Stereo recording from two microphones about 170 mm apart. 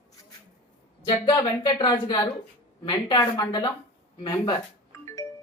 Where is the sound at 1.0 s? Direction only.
25° left (ahead or behind).